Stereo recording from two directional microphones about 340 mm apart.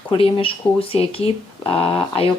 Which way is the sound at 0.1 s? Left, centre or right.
Centre.